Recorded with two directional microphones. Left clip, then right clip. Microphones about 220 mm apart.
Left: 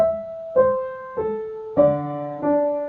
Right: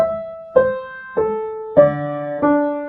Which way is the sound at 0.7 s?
45° right (ahead or behind).